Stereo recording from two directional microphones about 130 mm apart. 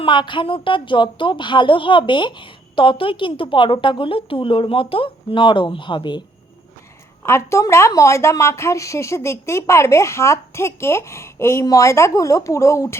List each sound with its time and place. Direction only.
0.0 s a woman's voice: 40° left (ahead or behind)
7.2 s a woman's voice: 20° left (ahead or behind)